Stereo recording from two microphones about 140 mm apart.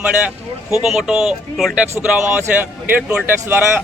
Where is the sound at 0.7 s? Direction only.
5° right (ahead or behind).